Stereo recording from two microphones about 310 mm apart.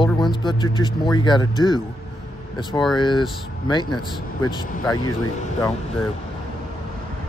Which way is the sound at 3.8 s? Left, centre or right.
Left.